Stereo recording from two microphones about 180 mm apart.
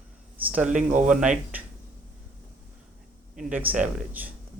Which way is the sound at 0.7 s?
45° right (ahead or behind).